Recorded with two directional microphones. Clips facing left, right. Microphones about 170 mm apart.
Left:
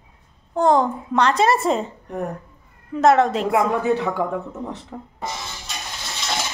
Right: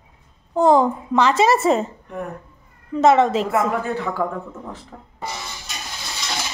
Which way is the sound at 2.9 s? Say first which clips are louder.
Right 1 dB; centre (ahead or behind).